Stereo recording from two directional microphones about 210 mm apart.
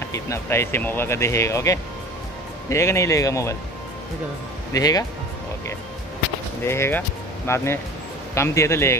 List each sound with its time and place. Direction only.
0.1 s speech: 15° left (ahead or behind)
4.7 s speech: 15° left (ahead or behind)
6.6 s speech: 10° left (ahead or behind)